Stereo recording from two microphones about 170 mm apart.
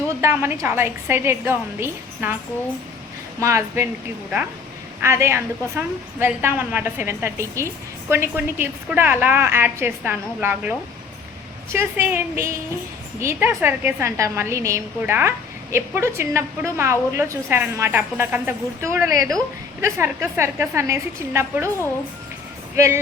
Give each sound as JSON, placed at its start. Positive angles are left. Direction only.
{"t": 0.2, "sound": "a woman's voice", "side_deg": -15}
{"t": 3.4, "sound": "a woman's voice", "side_deg": -15}
{"t": 5.0, "sound": "a woman's voice", "side_deg": -15}
{"t": 22.7, "sound": "speech", "side_deg": -15}